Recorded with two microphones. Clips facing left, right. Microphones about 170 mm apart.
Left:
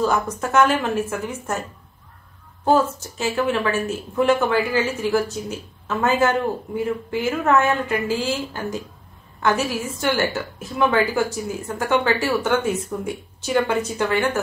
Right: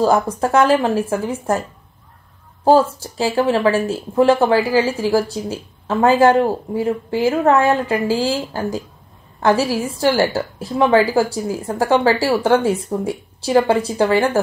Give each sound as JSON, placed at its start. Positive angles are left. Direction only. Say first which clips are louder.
{"t": 0.0, "sound": "a woman's voice", "louder": "right 6 dB", "side_deg": -35}
{"t": 2.6, "sound": "a woman's voice", "louder": "right 5 dB", "side_deg": -30}